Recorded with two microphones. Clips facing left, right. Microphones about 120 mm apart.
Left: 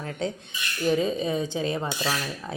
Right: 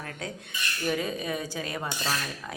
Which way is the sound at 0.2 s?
25° left (ahead or behind).